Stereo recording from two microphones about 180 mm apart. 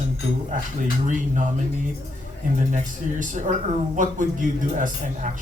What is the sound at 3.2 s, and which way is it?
Speech, 45° right (ahead or behind).